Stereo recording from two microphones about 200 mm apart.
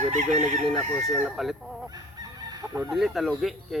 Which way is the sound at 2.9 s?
Centre (ahead or behind).